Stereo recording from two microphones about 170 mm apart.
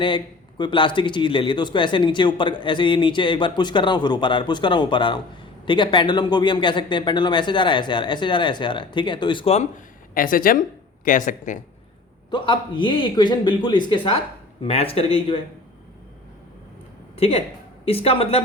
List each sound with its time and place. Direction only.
0.6 s speech: 30° left (ahead or behind)
10.2 s speech: 55° left (ahead or behind)
12.3 s speech: 30° left (ahead or behind)
17.2 s speech: 35° left (ahead or behind)